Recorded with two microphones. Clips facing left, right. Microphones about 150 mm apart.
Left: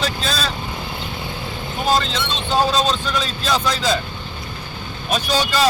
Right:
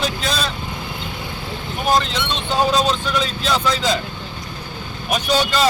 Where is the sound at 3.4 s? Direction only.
15° left (ahead or behind).